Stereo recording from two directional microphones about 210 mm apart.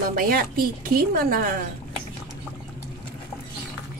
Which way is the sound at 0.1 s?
45° right (ahead or behind).